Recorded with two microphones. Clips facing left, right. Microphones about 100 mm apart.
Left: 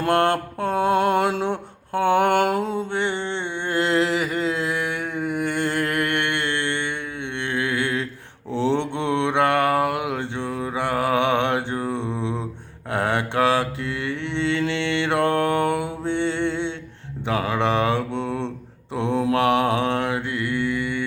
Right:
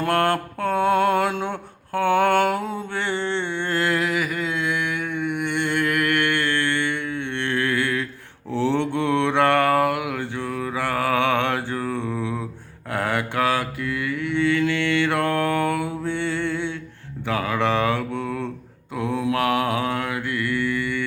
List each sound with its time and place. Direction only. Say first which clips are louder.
0.0 s mantra: left 1 dB; 25° left (ahead or behind)